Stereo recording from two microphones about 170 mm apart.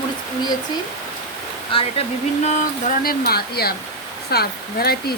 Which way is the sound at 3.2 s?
65° left (ahead or behind).